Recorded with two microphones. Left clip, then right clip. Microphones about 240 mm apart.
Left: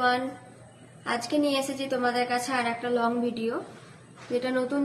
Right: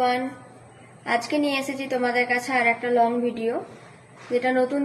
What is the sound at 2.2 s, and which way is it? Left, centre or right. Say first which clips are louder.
Speech: right 6 dB; left.